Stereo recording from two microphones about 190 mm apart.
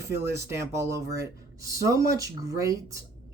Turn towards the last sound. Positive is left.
turn(degrees=-15)  # may be behind; listen again after turning